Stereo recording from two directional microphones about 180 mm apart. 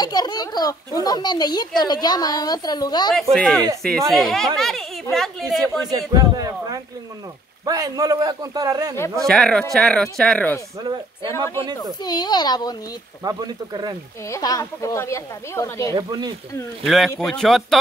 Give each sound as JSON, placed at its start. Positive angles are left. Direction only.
{"t": 0.0, "sound": "a child's voice", "side_deg": 20}
{"t": 3.2, "sound": "speech", "side_deg": 5}
{"t": 5.6, "sound": "a man's voice", "side_deg": -20}
{"t": 9.2, "sound": "speech", "side_deg": 5}
{"t": 12.0, "sound": "a woman's voice", "side_deg": 20}
{"t": 13.2, "sound": "a man's voice", "side_deg": -20}
{"t": 14.3, "sound": "speech", "side_deg": 20}
{"t": 15.9, "sound": "a man's voice", "side_deg": -25}
{"t": 16.8, "sound": "speech", "side_deg": 0}